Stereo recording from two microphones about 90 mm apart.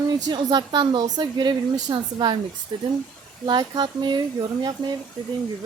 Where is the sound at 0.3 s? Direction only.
55° right (ahead or behind).